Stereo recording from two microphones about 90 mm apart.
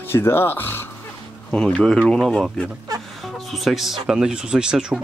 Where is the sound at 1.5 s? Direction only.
10° left (ahead or behind).